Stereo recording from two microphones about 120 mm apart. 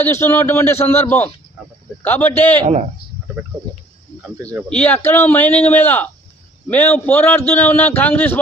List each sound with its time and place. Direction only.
0.0 s a man's voice: 20° left (ahead or behind)
4.7 s a man's voice: 10° left (ahead or behind)